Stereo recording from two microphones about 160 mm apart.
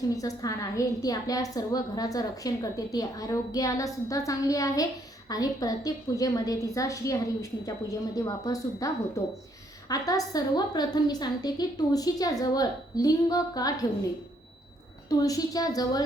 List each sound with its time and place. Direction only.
0.2 s a woman's voice: 20° left (ahead or behind)
15.1 s a woman's voice: 20° left (ahead or behind)